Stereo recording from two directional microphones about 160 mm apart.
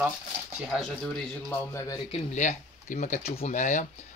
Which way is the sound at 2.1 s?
45° left (ahead or behind).